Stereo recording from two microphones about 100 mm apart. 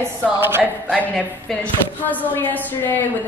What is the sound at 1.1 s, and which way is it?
A woman's voice, 10° left (ahead or behind).